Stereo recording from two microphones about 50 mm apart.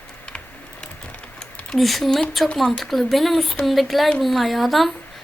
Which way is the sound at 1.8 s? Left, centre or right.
Centre.